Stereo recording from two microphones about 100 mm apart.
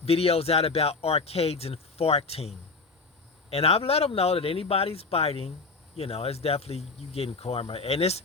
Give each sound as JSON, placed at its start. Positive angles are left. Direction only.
{"t": 0.0, "sound": "speech", "side_deg": 85}